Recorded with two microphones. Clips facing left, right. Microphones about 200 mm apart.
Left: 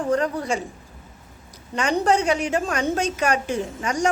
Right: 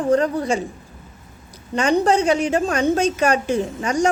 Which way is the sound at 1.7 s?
30° right (ahead or behind).